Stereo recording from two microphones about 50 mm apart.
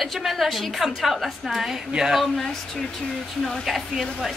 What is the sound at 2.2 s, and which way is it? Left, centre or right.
A woman's voice, centre.